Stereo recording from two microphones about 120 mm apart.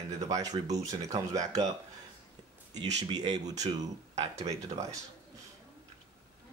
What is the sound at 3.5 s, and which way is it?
Speech, 70° right (ahead or behind).